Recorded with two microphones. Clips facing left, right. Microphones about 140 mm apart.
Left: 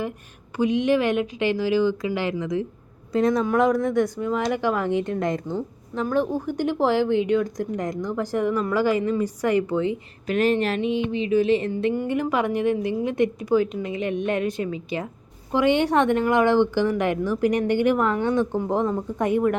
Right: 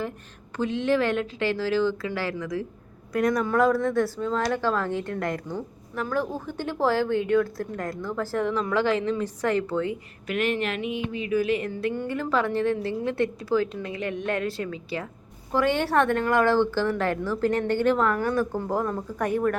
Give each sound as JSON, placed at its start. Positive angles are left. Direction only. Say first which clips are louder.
{"t": 0.5, "sound": "a woman's voice", "louder": "left 4 dB", "side_deg": 15}
{"t": 10.2, "sound": "a woman's voice", "louder": "left 5 dB", "side_deg": 35}